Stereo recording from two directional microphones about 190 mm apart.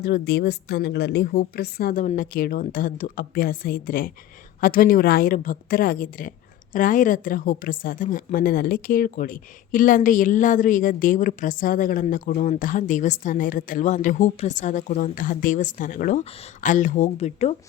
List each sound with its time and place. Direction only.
0.0 s a woman's voice: 55° left (ahead or behind); by 17.5 s 35° left (ahead or behind)